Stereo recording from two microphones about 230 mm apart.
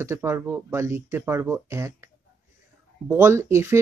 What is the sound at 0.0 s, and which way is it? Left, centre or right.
Speech, centre.